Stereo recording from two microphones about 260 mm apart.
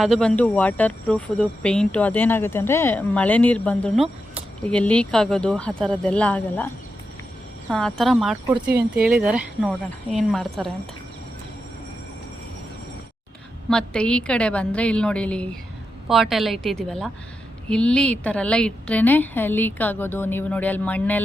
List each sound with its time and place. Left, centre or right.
0.0 s speech: centre
7.7 s speech: centre
13.7 s a woman's voice: centre